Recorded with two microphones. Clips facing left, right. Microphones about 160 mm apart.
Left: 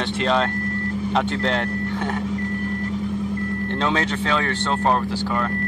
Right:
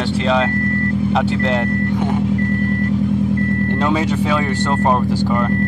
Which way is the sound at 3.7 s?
10° right (ahead or behind).